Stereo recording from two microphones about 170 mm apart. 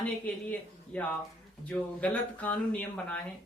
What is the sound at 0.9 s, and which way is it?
A woman's voice, 10° left (ahead or behind).